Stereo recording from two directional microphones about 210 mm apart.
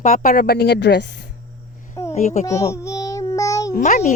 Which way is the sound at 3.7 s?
35° left (ahead or behind).